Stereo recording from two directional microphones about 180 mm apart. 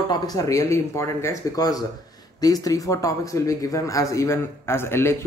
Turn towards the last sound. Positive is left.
turn(degrees=15)  # may be behind; listen again after turning